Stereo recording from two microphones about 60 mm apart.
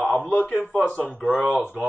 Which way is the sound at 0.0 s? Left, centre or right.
Left.